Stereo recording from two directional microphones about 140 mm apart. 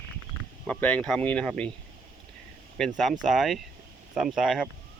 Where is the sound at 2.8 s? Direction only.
Centre (ahead or behind).